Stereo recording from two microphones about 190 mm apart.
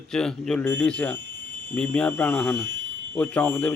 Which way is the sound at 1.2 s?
65° right (ahead or behind).